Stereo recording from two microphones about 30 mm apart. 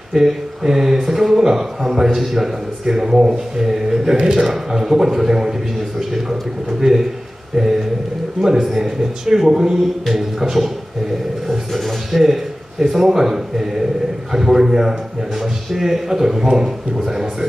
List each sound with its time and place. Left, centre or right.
0.1 s a man's voice: centre
4.2 s a man's voice: right; by 10.7 s centre
11.7 s music: centre
12.8 s a man's voice: centre